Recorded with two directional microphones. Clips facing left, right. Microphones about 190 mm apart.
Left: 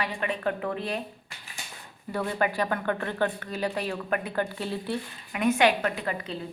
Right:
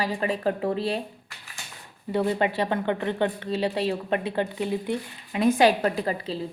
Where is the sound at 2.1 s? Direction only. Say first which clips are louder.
Right 4 dB; 25° right (ahead or behind).